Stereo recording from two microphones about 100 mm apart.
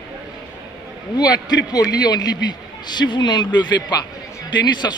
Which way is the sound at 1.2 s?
40° left (ahead or behind).